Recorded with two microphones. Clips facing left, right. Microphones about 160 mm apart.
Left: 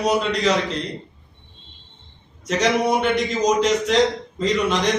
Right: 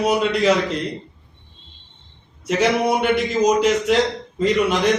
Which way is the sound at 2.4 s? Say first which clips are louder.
Right 1 dB; 10° right (ahead or behind).